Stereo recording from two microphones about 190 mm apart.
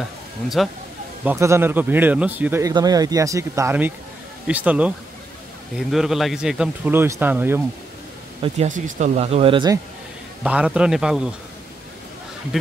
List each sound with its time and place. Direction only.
0.6 s speech: centre (ahead or behind)
1.2 s a man's voice: 15° right (ahead or behind)
8.4 s speech: 40° right (ahead or behind)
10.4 s speech: 5° right (ahead or behind)